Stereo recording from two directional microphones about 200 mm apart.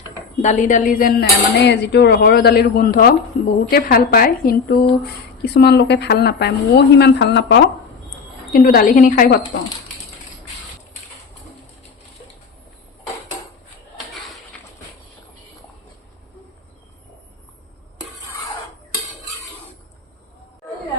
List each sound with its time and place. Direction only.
0.4 s a woman's voice: 40° left (ahead or behind); by 7.6 s 60° left (ahead or behind)
8.5 s speech: 45° left (ahead or behind)